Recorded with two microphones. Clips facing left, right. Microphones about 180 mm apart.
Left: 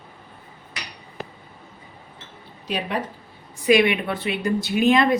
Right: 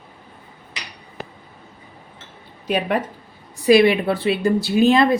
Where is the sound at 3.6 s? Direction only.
35° right (ahead or behind).